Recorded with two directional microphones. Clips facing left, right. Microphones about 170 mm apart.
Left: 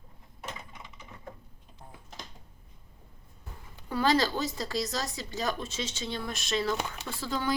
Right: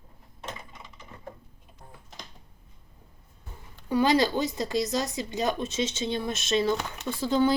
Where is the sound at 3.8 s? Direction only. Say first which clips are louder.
Right 4 dB; 15° right (ahead or behind).